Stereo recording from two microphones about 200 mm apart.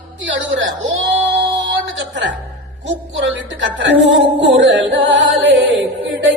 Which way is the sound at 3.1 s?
65° right (ahead or behind).